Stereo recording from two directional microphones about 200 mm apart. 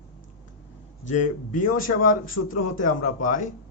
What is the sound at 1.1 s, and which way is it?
Speech, 40° left (ahead or behind).